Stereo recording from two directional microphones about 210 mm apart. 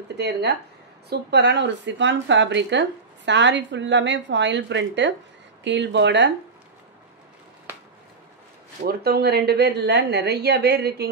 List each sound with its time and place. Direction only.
0.1 s a woman's voice: 55° right (ahead or behind)
8.8 s a woman's voice: 50° right (ahead or behind)